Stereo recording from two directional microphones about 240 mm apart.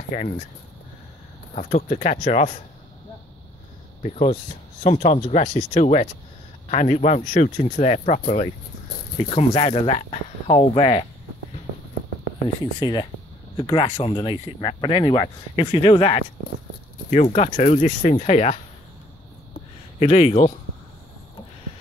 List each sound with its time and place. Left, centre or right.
1.5 s speech: left
4.0 s speech: left
12.8 s speech: centre
20.0 s speech: left